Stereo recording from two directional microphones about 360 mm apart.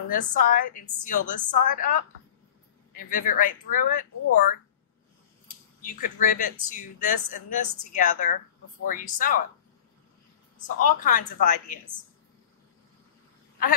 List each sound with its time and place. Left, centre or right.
0.1 s a woman's voice: left
5.8 s a woman's voice: left
10.8 s a woman's voice: left